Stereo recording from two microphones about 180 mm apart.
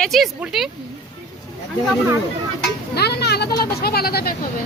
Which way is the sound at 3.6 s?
60° left (ahead or behind).